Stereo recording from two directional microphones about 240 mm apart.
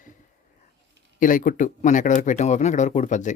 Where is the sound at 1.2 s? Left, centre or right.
Left.